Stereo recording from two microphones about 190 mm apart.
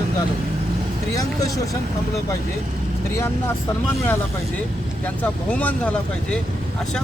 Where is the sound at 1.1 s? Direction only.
20° left (ahead or behind).